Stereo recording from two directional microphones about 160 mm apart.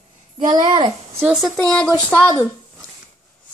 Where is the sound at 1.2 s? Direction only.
5° right (ahead or behind).